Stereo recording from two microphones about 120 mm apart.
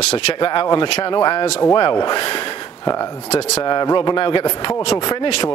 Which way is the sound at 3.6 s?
40° left (ahead or behind).